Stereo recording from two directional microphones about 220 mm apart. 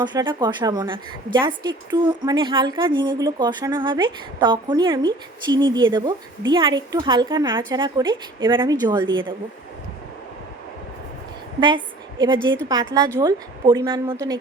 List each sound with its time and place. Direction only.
0.0 s a woman's voice: 20° right (ahead or behind)
12.2 s a woman's voice: 20° right (ahead or behind)